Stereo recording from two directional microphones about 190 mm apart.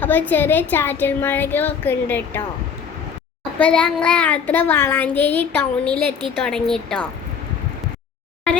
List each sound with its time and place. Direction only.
0.0 s a child's voice: 10° left (ahead or behind)
3.6 s a child's voice: 5° left (ahead or behind)